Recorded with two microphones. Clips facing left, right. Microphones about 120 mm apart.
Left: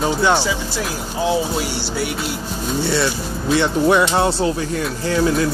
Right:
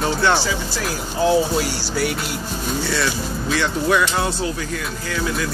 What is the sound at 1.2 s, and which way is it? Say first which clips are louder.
Speech: right 2 dB; 20° left (ahead or behind).